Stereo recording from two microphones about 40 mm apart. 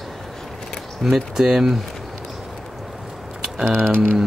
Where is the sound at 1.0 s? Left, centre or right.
Centre.